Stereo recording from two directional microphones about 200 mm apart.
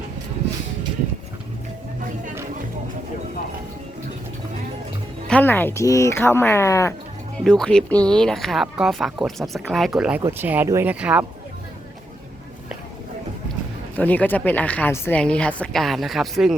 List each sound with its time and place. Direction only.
5.3 s a woman's voice: 10° left (ahead or behind)
7.4 s speech: 5° left (ahead or behind)
13.9 s a woman's voice: 5° left (ahead or behind)